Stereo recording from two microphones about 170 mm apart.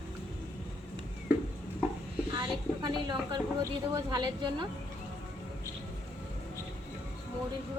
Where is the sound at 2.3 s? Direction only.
25° right (ahead or behind).